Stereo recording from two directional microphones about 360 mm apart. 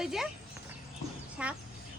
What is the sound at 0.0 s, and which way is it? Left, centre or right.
Horse, centre.